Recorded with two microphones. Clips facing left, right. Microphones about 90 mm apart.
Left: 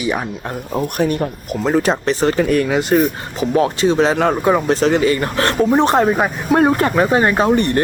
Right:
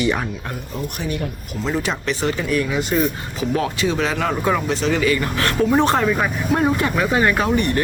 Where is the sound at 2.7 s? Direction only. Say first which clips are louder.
Left 6 dB; 70° left (ahead or behind).